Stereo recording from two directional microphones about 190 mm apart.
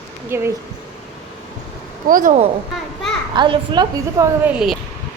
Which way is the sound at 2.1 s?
45° right (ahead or behind).